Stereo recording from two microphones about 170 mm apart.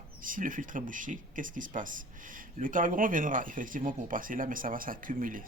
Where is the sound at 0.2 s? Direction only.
55° right (ahead or behind).